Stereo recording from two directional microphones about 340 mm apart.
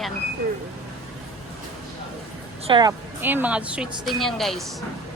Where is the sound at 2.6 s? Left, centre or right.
Centre.